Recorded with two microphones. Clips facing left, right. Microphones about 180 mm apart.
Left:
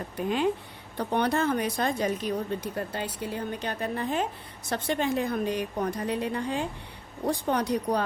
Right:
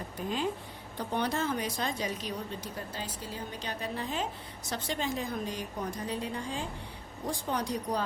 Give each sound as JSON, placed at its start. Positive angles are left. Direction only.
{"t": 0.2, "sound": "a woman's voice", "side_deg": 65}